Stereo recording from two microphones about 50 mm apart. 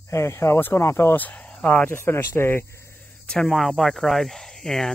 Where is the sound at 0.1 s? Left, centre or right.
Left.